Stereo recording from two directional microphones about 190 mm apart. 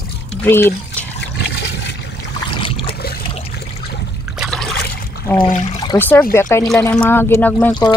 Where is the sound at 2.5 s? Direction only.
25° left (ahead or behind).